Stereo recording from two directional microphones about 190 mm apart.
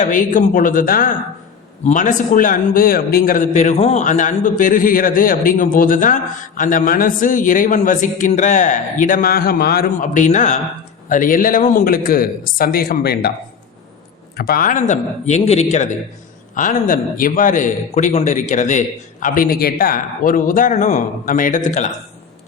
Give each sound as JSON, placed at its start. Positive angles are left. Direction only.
{"t": 0.0, "sound": "a man's voice", "side_deg": 45}
{"t": 14.3, "sound": "a man's voice", "side_deg": 50}